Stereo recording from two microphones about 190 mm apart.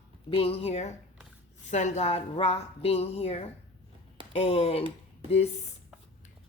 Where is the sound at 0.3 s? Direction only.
30° left (ahead or behind).